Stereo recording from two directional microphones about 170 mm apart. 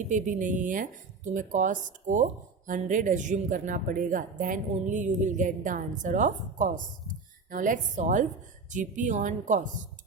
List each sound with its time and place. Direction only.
0.1 s a woman's voice: 50° right (ahead or behind)